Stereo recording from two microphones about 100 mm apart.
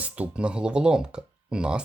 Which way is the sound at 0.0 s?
10° right (ahead or behind).